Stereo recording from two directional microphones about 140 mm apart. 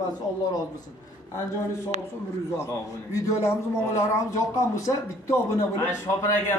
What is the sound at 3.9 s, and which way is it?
A man's voice, 20° left (ahead or behind).